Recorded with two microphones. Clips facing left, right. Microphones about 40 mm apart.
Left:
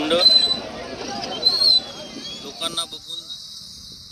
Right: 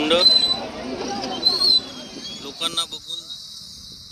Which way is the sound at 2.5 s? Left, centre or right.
Right.